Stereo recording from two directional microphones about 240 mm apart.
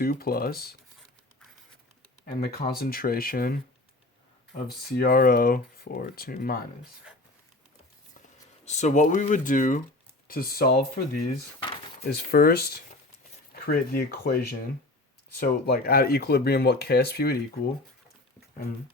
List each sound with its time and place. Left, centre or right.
0.0 s speech: left
2.2 s speech: left
8.6 s speech: left
12.1 s speech: left